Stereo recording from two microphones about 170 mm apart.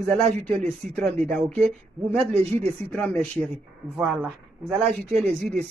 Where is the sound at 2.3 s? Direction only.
35° right (ahead or behind).